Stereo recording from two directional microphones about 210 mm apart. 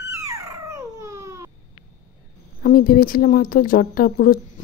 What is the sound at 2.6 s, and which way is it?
Speech, 40° left (ahead or behind).